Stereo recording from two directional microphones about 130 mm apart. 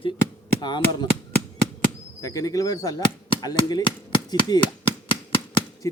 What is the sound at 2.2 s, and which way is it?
A man's voice, 25° left (ahead or behind).